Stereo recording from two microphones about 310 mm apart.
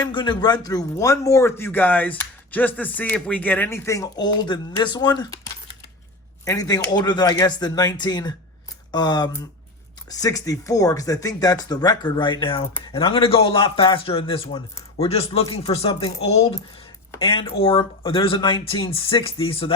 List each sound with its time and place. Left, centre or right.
0.0 s speech: centre
6.4 s speech: centre